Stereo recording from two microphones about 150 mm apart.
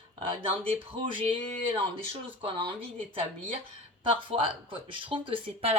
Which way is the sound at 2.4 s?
35° right (ahead or behind).